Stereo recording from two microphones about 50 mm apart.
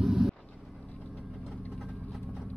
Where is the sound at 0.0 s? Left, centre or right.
Centre.